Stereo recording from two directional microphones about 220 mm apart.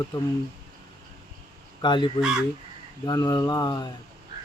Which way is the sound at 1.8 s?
20° left (ahead or behind).